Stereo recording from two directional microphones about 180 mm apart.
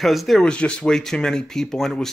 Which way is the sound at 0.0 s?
Centre (ahead or behind).